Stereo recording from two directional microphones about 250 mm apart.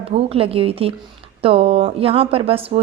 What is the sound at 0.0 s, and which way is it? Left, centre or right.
Speech, right.